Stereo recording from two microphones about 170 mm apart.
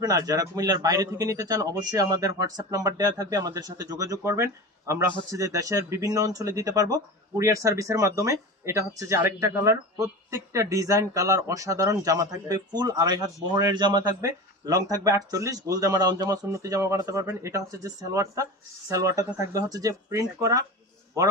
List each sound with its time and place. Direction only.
0.0 s speech: 20° right (ahead or behind)